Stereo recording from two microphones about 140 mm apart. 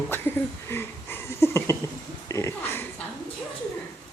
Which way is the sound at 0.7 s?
15° left (ahead or behind).